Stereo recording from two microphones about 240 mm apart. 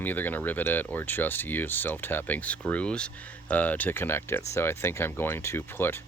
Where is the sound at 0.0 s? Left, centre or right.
Centre.